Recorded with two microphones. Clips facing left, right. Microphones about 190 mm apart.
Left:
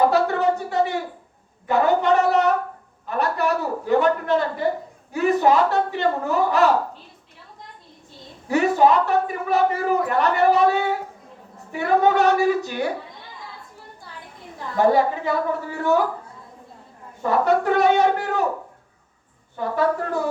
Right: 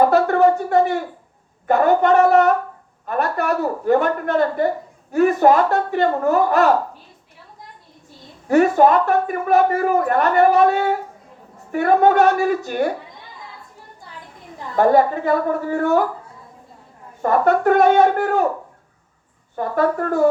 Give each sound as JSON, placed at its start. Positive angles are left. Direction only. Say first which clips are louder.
{"t": 0.1, "sound": "a sound", "louder": "right 5 dB", "side_deg": -55}
{"t": 1.6, "sound": "speech", "louder": "right 3 dB", "side_deg": -50}
{"t": 8.4, "sound": "speech", "louder": "right 4 dB", "side_deg": -50}
{"t": 14.8, "sound": "speech", "louder": "right 3 dB", "side_deg": -50}
{"t": 17.2, "sound": "speech", "louder": "right 3 dB", "side_deg": -50}
{"t": 19.5, "sound": "speech", "louder": "right 3 dB", "side_deg": -50}